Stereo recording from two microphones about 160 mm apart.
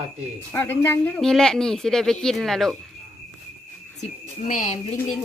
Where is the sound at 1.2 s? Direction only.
5° left (ahead or behind).